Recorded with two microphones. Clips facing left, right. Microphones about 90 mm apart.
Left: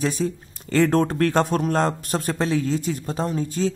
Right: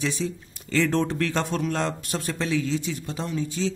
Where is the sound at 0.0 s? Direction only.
45° left (ahead or behind).